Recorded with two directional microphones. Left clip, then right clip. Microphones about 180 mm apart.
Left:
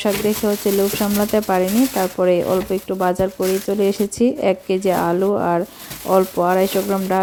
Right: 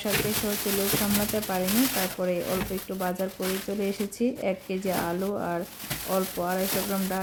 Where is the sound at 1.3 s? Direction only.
35° left (ahead or behind).